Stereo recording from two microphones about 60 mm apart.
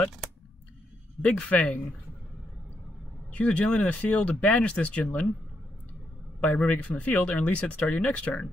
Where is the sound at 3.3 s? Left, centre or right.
Left.